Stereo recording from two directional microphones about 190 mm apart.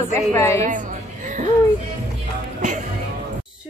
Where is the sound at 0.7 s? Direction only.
40° right (ahead or behind).